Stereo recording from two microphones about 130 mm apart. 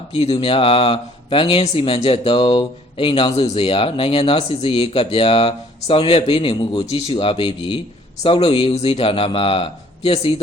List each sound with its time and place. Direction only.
0.1 s speech: 45° left (ahead or behind)